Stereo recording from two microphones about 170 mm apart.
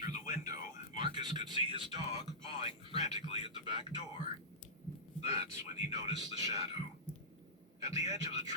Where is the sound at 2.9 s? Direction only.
40° left (ahead or behind).